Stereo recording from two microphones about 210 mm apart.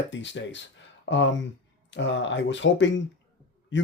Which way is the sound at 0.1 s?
60° left (ahead or behind).